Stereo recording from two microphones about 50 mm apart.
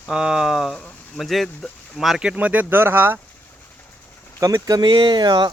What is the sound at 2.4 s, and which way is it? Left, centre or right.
Speech, right.